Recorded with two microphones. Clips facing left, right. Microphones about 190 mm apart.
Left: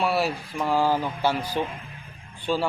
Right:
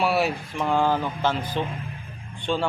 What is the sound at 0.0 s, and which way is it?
A man's voice, centre (ahead or behind).